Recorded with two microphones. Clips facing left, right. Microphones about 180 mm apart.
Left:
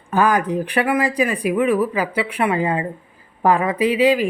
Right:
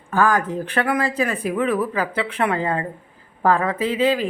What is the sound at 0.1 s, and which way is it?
Speech, 20° left (ahead or behind).